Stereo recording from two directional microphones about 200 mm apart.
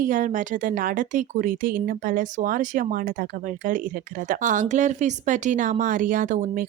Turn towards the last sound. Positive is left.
turn(degrees=-40)  # may be behind; listen again after turning